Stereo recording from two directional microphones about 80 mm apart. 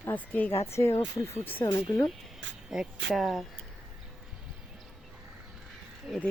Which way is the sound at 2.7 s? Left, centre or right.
Centre.